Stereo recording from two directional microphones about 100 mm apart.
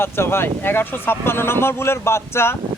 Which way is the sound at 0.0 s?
25° left (ahead or behind).